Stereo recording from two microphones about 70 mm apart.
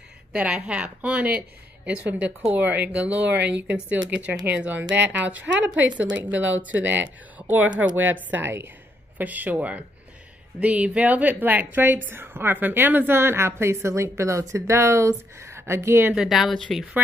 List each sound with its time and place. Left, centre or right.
0.3 s a woman's voice: centre; by 16.2 s right
16.2 s speech: centre